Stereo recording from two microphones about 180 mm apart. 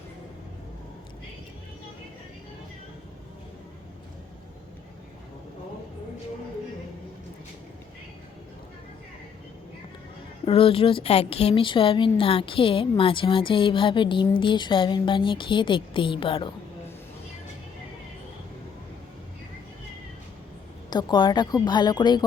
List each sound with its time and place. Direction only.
10.4 s a woman's voice: 30° left (ahead or behind)
20.9 s a woman's voice: 25° left (ahead or behind)